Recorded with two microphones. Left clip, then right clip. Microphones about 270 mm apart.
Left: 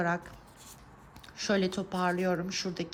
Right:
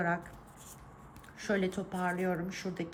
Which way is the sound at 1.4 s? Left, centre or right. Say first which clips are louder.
Left 3 dB; centre.